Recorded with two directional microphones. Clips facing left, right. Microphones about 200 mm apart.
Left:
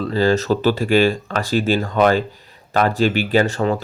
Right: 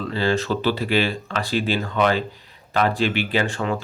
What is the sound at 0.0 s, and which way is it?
Speech, 40° left (ahead or behind).